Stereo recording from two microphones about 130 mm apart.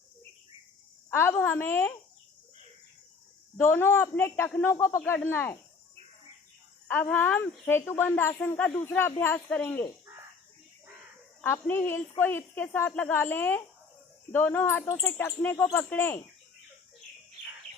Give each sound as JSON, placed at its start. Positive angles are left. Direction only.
{"t": 1.1, "sound": "speech", "side_deg": 15}
{"t": 3.6, "sound": "speech", "side_deg": 15}
{"t": 6.8, "sound": "speech", "side_deg": 15}
{"t": 11.4, "sound": "speech", "side_deg": 15}